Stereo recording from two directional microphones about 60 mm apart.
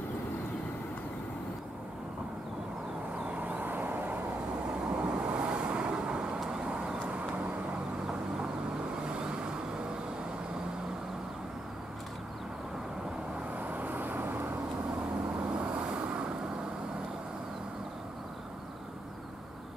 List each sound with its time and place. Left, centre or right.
3.3 s vehicle: right
4.7 s vehicle: centre
9.0 s vehicle: centre
13.6 s vehicle: right
15.5 s vehicle: centre